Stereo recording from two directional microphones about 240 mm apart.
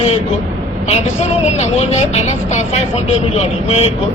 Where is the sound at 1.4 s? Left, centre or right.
Left.